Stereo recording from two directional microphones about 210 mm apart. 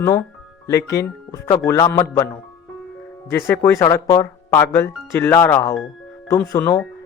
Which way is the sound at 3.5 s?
10° left (ahead or behind).